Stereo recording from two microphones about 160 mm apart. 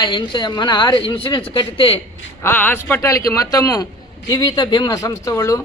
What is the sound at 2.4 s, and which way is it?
Speech, 10° left (ahead or behind).